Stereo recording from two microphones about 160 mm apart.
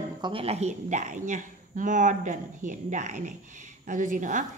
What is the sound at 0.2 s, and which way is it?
A woman's voice, 35° right (ahead or behind).